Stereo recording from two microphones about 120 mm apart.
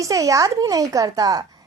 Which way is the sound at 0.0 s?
25° right (ahead or behind).